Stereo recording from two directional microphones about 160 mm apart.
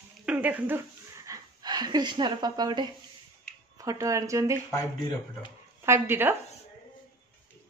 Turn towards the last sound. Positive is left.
turn(degrees=-15)  # may be behind; listen again after turning